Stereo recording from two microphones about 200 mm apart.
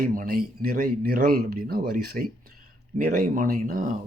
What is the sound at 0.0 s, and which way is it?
Speech, 45° right (ahead or behind).